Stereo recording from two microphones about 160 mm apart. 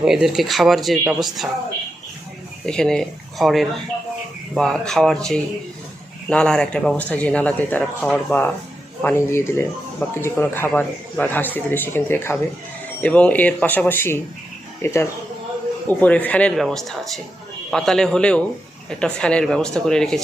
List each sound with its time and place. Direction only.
0.0 s speech: 5° right (ahead or behind)
2.6 s speech: 5° left (ahead or behind)